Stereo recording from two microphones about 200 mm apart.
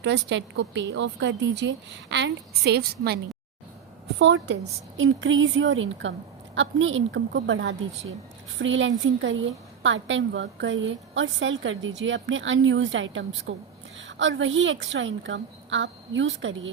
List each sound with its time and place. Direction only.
0.0 s a woman's voice: 65° right (ahead or behind)
4.2 s a woman's voice: 60° right (ahead or behind)
4.9 s a woman's voice: 70° right (ahead or behind)